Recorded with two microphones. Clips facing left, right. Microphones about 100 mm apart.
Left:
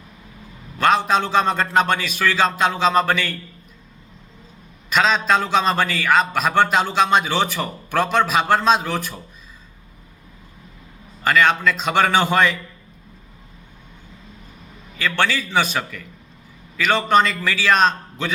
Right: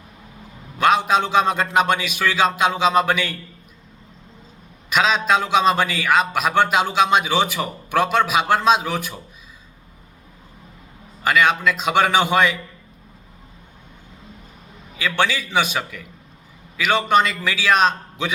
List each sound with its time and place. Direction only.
0.8 s a man's voice: 10° right (ahead or behind)
4.9 s a man's voice: 5° right (ahead or behind)
11.2 s a man's voice: 10° right (ahead or behind)
14.9 s a man's voice: 10° right (ahead or behind)